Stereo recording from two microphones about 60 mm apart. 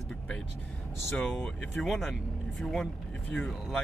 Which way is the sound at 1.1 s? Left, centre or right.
Centre.